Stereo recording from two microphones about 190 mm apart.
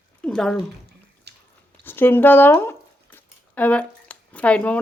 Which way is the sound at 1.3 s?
60° right (ahead or behind).